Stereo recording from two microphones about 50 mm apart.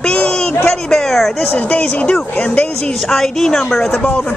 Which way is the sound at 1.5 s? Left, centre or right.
Left.